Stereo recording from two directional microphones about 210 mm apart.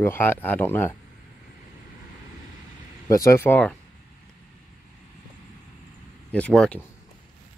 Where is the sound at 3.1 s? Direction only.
15° left (ahead or behind).